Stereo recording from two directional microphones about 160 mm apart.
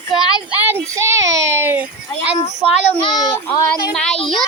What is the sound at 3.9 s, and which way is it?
Speech, 5° left (ahead or behind).